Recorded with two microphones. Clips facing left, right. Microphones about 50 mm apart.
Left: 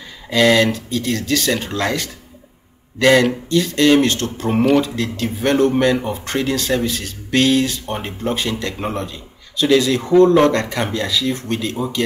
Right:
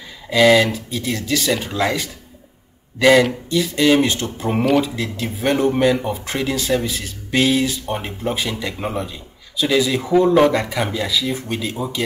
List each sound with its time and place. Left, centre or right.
0.3 s speech: centre
4.5 s speech: centre
4.8 s speech: centre